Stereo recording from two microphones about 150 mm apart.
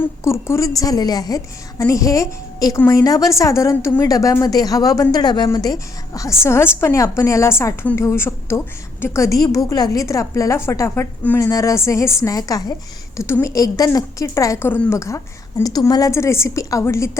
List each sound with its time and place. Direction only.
0.3 s a woman's voice: 20° left (ahead or behind)